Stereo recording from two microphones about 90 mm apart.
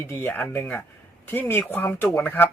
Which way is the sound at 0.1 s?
25° left (ahead or behind).